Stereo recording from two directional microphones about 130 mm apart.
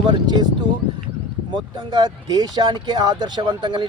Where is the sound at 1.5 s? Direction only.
35° right (ahead or behind).